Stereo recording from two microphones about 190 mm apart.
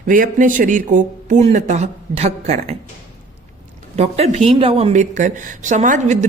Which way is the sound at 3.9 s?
35° right (ahead or behind).